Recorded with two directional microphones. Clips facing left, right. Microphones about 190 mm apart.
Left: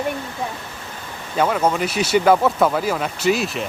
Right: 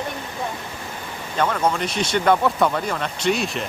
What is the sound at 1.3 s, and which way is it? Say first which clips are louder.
Speech: left 3 dB; 10° left (ahead or behind).